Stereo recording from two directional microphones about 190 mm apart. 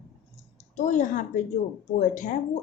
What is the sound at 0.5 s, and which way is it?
Speech, 40° left (ahead or behind).